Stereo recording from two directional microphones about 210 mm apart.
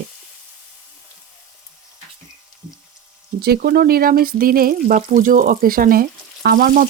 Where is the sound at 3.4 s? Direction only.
45° right (ahead or behind).